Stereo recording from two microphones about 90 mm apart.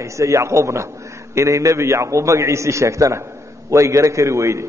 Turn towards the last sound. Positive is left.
turn(degrees=-35)  # may be behind; listen again after turning